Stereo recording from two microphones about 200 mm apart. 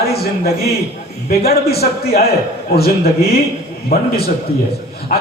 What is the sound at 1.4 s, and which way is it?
Speech, 50° left (ahead or behind).